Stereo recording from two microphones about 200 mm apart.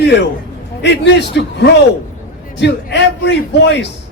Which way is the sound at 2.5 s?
60° left (ahead or behind).